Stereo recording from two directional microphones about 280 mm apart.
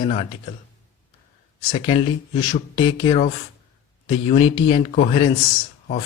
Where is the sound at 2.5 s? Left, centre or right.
Centre.